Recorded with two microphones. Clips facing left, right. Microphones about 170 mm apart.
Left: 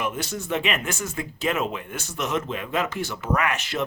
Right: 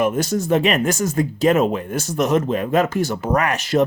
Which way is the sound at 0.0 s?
45° right (ahead or behind).